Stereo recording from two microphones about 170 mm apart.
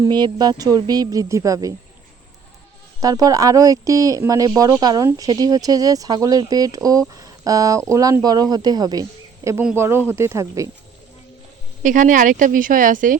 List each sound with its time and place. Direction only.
0.0 s speech: 25° right (ahead or behind)
3.0 s speech: 20° right (ahead or behind)
11.8 s a woman's voice: 50° right (ahead or behind)